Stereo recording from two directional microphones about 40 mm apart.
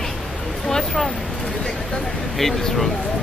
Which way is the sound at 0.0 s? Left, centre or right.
Centre.